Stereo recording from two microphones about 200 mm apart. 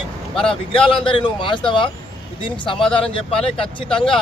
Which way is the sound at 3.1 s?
25° left (ahead or behind).